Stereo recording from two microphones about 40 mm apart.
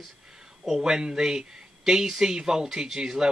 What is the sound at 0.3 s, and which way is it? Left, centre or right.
Speech, centre.